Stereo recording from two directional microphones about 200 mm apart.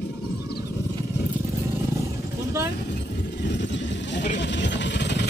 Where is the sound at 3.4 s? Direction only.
60° left (ahead or behind).